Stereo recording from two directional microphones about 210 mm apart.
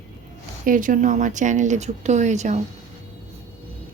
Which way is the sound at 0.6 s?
40° right (ahead or behind).